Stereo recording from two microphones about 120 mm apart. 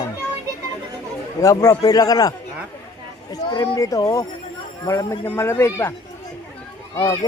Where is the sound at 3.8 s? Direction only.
30° left (ahead or behind).